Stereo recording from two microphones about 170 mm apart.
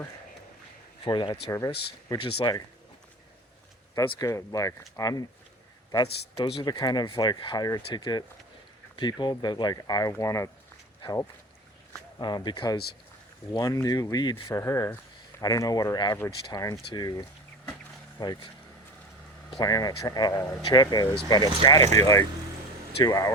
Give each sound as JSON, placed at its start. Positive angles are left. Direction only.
{"t": 1.0, "sound": "speech", "side_deg": 25}
{"t": 3.9, "sound": "speech", "side_deg": 20}
{"t": 6.3, "sound": "speech", "side_deg": 35}
{"t": 6.6, "sound": "speech", "side_deg": 25}
{"t": 19.5, "sound": "speech", "side_deg": 20}